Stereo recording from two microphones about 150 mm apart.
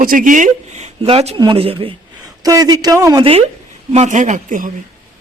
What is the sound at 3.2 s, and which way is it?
Speech, 40° right (ahead or behind).